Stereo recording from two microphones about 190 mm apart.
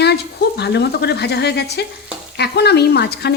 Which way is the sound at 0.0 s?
60° left (ahead or behind).